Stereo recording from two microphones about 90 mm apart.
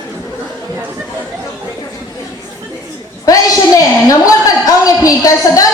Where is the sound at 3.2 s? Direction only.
40° left (ahead or behind).